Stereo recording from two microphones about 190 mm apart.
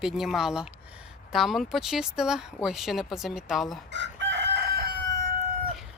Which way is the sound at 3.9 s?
70° right (ahead or behind).